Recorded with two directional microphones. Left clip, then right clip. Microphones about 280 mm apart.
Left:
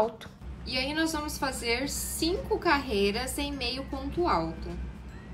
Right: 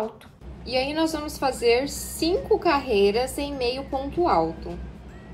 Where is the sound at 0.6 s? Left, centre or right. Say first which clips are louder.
Right 6 dB; centre.